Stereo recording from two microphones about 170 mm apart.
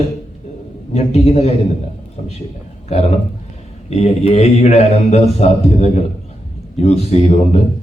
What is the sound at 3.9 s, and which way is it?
A man's voice, 40° left (ahead or behind).